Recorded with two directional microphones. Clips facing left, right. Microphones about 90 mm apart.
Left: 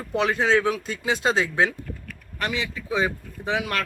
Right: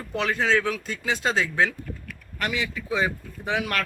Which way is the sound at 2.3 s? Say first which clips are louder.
Even; 30° left (ahead or behind).